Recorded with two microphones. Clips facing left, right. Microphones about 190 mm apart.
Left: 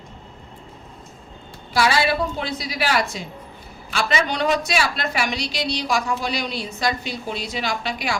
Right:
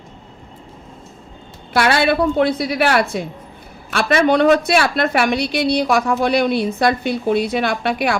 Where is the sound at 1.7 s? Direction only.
60° right (ahead or behind).